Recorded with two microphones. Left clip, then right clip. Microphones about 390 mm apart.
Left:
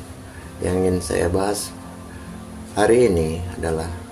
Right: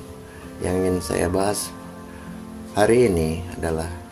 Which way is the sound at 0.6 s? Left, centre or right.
Right.